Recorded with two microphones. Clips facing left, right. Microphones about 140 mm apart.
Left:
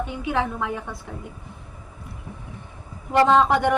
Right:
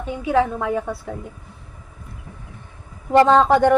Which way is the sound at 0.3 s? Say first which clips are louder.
Right 7 dB; 40° right (ahead or behind).